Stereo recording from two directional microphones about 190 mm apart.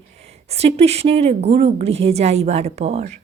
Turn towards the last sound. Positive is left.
turn(degrees=-35)  # may be behind; listen again after turning